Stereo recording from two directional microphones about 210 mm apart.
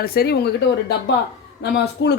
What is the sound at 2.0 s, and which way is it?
Speech, 55° left (ahead or behind).